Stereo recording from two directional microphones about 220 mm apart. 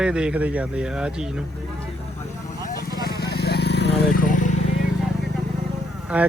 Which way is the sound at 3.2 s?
45° left (ahead or behind).